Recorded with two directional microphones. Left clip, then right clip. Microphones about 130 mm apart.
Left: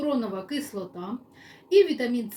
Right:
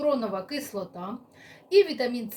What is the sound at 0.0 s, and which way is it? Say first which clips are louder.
A woman's voice: right 2 dB; 25° right (ahead or behind).